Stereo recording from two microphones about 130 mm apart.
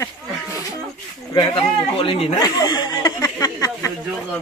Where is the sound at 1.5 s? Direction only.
45° left (ahead or behind).